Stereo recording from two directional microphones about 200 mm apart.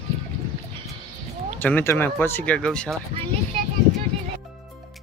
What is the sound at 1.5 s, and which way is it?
Speech, 10° left (ahead or behind).